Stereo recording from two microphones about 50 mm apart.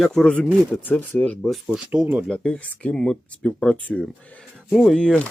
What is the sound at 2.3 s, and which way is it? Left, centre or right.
Speech, centre.